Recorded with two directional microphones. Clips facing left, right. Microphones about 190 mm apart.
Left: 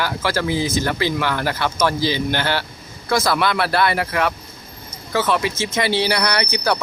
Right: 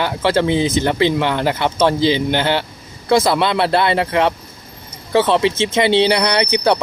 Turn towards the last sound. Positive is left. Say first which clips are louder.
# right 5 dB
turn(degrees=-25)  # may be behind; listen again after turning